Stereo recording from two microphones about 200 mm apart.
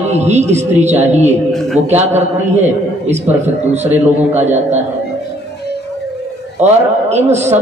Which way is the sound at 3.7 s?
35° right (ahead or behind).